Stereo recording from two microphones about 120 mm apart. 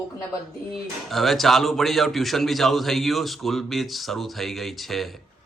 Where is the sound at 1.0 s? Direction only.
Centre (ahead or behind).